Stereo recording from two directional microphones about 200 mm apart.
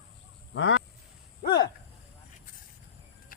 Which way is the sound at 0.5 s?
70° left (ahead or behind).